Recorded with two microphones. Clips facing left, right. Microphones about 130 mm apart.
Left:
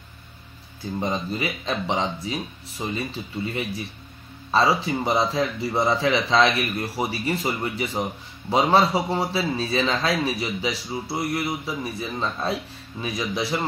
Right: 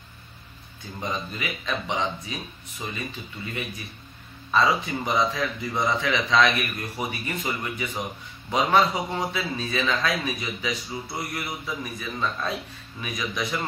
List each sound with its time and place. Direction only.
0.9 s speech: 35° left (ahead or behind)
4.5 s speech: 30° left (ahead or behind)